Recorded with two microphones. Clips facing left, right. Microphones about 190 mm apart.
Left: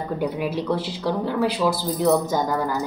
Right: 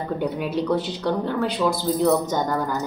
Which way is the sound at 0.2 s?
5° left (ahead or behind).